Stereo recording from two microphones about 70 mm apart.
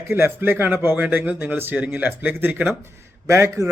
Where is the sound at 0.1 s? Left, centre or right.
Right.